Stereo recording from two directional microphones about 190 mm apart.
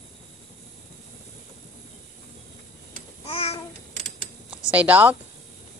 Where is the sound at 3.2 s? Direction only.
30° left (ahead or behind).